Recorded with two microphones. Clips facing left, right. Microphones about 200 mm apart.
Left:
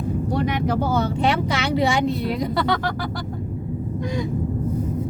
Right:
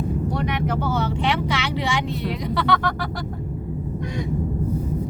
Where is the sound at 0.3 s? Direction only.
35° left (ahead or behind).